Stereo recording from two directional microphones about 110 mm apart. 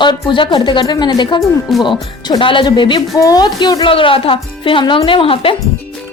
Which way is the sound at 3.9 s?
55° left (ahead or behind).